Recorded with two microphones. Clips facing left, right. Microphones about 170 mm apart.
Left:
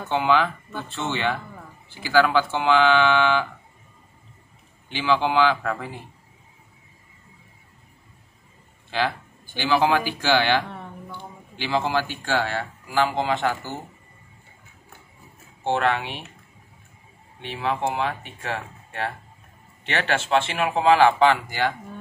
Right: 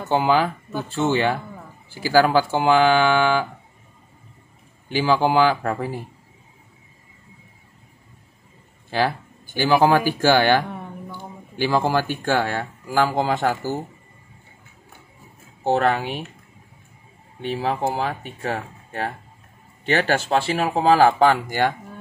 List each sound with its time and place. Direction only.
0.1 s speech: 40° right (ahead or behind)
4.8 s speech: 45° right (ahead or behind)
9.6 s speech: 45° right (ahead or behind)
15.6 s speech: 40° right (ahead or behind)
17.4 s speech: 40° right (ahead or behind)